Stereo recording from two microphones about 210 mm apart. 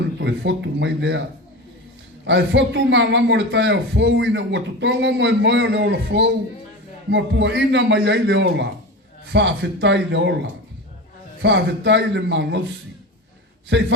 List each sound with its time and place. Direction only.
0.2 s a man's voice: 60° right (ahead or behind)
2.2 s a man's voice: 55° right (ahead or behind)
11.4 s a man's voice: 55° right (ahead or behind)
13.7 s a man's voice: 60° right (ahead or behind)